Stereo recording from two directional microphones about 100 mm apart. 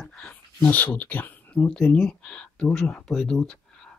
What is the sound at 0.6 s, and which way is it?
Speech, 15° left (ahead or behind).